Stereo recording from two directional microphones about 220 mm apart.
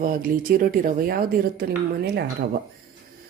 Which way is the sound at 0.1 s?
40° right (ahead or behind).